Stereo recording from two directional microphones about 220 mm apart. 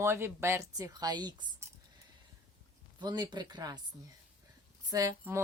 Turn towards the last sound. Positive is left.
turn(degrees=-15)  # may be behind; listen again after turning